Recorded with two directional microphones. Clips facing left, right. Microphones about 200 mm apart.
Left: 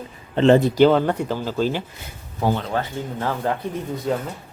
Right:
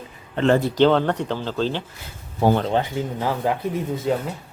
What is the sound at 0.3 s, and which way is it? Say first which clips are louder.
Speech: left 4 dB; 20° left (ahead or behind).